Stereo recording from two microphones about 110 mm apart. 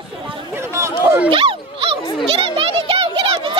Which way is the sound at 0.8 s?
25° right (ahead or behind).